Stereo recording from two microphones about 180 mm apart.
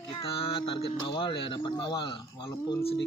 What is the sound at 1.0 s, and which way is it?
A man's voice, 30° left (ahead or behind).